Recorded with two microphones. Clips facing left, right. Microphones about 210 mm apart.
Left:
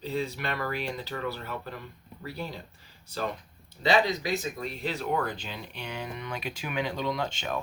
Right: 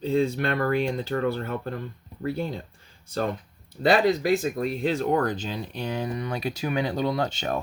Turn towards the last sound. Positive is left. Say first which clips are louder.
# right 5 dB
turn(degrees=-40)  # may be behind; listen again after turning